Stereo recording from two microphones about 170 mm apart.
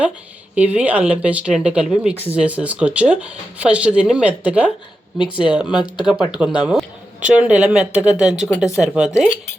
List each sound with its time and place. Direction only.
0.5 s speech: 10° right (ahead or behind)
5.2 s speech: 30° left (ahead or behind)
6.1 s speech: 5° right (ahead or behind)